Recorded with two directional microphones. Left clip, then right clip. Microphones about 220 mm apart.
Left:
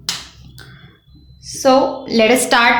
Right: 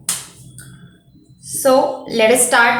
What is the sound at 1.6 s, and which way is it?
A woman's voice, 35° left (ahead or behind).